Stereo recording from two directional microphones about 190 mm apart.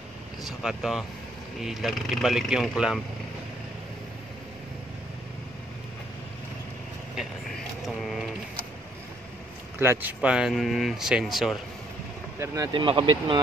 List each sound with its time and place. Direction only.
0.4 s speech: centre (ahead or behind)
7.8 s mechanisms: centre (ahead or behind)
9.8 s speech: 10° right (ahead or behind)
12.4 s speech: 20° right (ahead or behind)